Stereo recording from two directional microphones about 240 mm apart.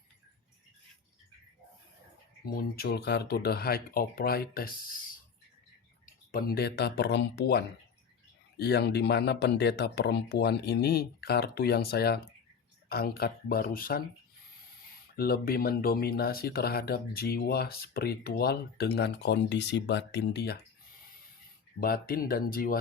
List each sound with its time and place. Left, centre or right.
2.6 s speech: left
6.3 s speech: left
15.1 s speech: left
21.8 s speech: left